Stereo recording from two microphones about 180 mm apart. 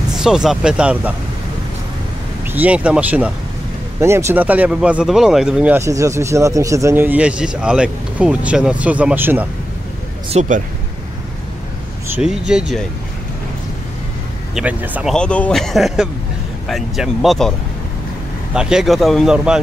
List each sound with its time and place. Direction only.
0.2 s a man's voice: 5° right (ahead or behind)
2.4 s speech: 10° right (ahead or behind)
10.3 s speech: 35° right (ahead or behind)
12.2 s a man's voice: 5° right (ahead or behind)
14.5 s speech: 10° right (ahead or behind)
15.1 s a man's voice: 5° left (ahead or behind)
18.5 s a man's voice: 5° right (ahead or behind)